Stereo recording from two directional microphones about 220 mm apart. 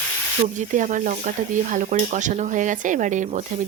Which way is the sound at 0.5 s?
35° right (ahead or behind).